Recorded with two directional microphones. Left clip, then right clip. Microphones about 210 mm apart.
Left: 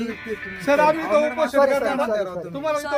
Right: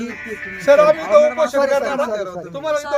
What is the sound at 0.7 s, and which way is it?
A man's voice, 20° right (ahead or behind).